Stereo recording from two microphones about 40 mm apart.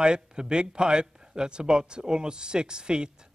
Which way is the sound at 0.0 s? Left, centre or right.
Right.